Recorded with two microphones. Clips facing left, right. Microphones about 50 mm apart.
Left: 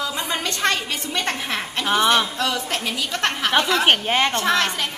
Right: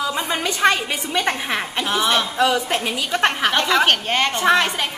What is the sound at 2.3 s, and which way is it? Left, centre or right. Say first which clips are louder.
A woman's voice: right 5 dB; centre.